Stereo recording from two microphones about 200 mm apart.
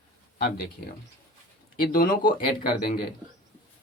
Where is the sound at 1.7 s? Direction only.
45° left (ahead or behind).